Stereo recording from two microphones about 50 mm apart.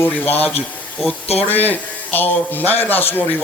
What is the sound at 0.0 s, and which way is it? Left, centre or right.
Speech, left.